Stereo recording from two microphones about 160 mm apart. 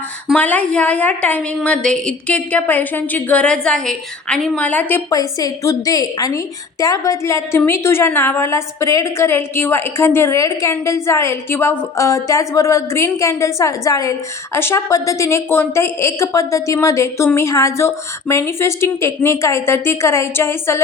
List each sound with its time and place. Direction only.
0.3 s a woman's voice: 10° left (ahead or behind)